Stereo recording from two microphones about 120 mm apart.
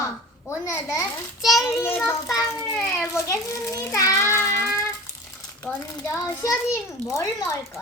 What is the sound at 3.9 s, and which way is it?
Child singing, 25° left (ahead or behind).